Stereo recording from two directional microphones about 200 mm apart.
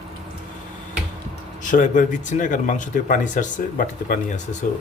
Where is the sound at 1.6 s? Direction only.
40° left (ahead or behind).